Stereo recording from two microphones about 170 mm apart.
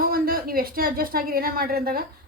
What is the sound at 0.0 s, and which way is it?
A woman's voice, 60° right (ahead or behind).